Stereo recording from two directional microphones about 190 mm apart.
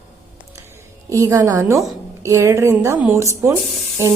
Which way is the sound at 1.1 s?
15° right (ahead or behind).